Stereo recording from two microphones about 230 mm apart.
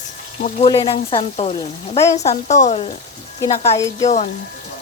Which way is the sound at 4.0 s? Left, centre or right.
Left.